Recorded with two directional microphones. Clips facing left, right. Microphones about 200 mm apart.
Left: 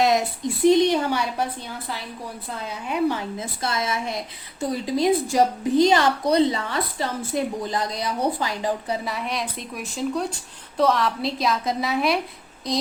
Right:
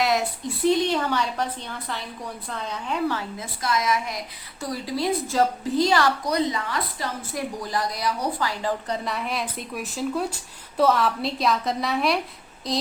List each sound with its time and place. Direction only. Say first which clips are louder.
0.0 s a woman's voice: left 3 dB; 20° left (ahead or behind)
8.9 s speech: left 1 dB; centre (ahead or behind)